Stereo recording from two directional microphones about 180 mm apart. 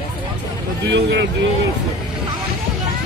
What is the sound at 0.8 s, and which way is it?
Speech, 70° right (ahead or behind).